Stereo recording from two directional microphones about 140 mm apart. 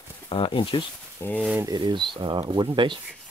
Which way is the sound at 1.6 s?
30° right (ahead or behind).